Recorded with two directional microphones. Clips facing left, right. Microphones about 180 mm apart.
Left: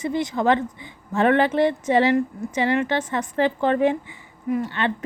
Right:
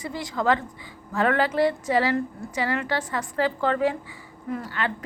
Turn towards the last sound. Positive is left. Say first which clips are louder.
# left 5 dB
turn(degrees=25)  # may be behind; listen again after turning